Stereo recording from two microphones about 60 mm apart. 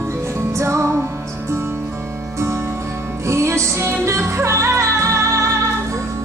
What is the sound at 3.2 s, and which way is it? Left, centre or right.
Music, right.